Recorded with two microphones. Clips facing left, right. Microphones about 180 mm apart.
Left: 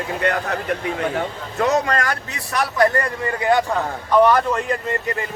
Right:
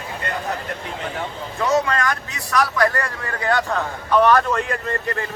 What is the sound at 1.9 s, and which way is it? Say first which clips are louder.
Speech: left 1 dB; 35° left (ahead or behind).